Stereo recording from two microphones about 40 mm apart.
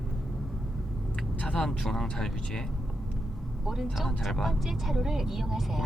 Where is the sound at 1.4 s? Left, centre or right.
Left.